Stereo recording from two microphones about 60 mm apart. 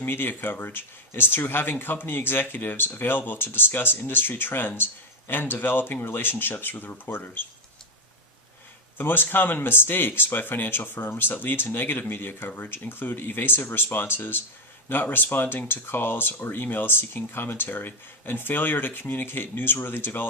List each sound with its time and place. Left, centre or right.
0.0 s speech: left
9.0 s speech: left